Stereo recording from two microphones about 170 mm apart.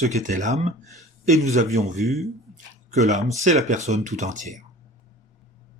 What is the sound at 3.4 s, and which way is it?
Speech, 45° right (ahead or behind).